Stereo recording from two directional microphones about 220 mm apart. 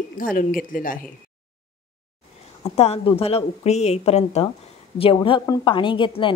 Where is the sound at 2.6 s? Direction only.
30° left (ahead or behind).